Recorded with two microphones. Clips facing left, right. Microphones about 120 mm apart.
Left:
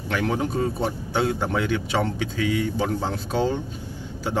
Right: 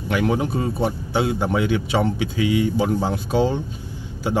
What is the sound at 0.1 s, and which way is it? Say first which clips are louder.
Speech: right 3 dB; 10° right (ahead or behind).